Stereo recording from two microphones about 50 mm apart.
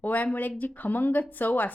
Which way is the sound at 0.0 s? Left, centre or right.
Left.